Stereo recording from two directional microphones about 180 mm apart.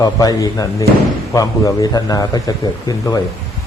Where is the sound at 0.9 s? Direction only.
65° right (ahead or behind).